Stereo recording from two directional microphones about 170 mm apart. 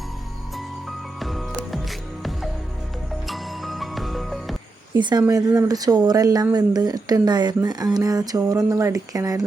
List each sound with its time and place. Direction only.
0.5 s music: centre (ahead or behind)
3.2 s music: centre (ahead or behind)
4.9 s speech: 25° right (ahead or behind)